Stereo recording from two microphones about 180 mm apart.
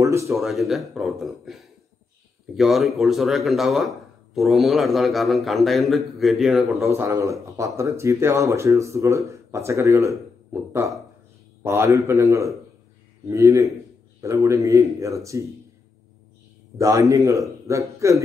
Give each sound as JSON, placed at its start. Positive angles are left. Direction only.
{"t": 0.0, "sound": "speech", "side_deg": -15}
{"t": 0.4, "sound": "speech", "side_deg": 0}
{"t": 7.0, "sound": "speech", "side_deg": -15}
{"t": 16.7, "sound": "speech", "side_deg": -15}